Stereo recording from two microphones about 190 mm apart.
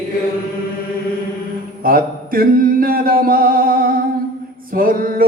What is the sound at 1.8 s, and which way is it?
Singing, 50° right (ahead or behind).